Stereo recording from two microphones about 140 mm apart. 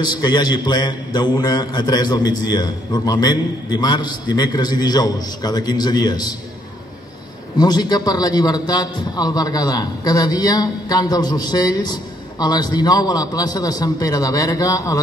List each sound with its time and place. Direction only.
0.0 s a man's voice: 30° left (ahead or behind)
7.5 s a man's voice: 30° left (ahead or behind)